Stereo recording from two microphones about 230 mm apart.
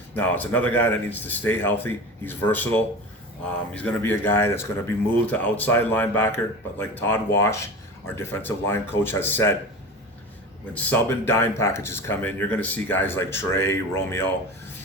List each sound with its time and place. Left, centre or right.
0.1 s speech: centre
10.8 s speech: centre